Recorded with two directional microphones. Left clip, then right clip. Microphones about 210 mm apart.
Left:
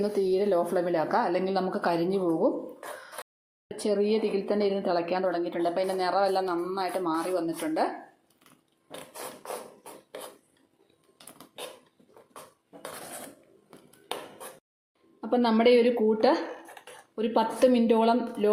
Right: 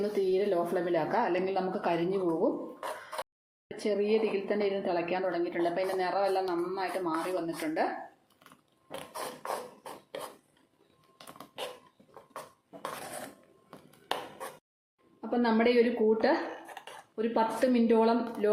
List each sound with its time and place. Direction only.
0.0 s a woman's voice: 20° left (ahead or behind)
3.8 s a woman's voice: 20° left (ahead or behind)
13.7 s tap: 5° right (ahead or behind)
15.2 s a woman's voice: 25° left (ahead or behind)